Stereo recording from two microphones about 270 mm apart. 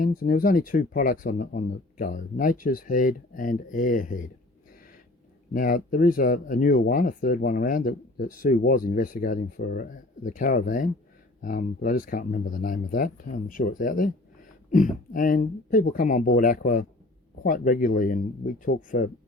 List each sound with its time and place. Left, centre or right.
0.0 s speech: left
5.5 s speech: left